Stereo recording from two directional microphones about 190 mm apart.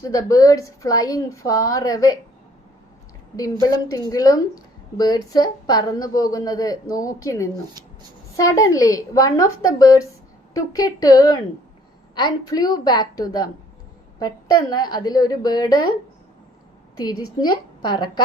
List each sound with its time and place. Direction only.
0.0 s a woman's voice: 15° left (ahead or behind)
3.3 s a woman's voice: 20° left (ahead or behind)
17.0 s a woman's voice: 20° left (ahead or behind)